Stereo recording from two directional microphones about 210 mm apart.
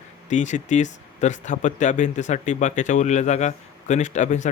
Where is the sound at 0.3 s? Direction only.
35° left (ahead or behind).